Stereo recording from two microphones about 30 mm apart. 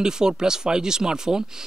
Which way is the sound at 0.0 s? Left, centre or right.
Right.